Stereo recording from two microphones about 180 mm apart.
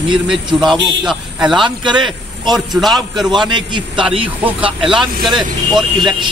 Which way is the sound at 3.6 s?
25° right (ahead or behind).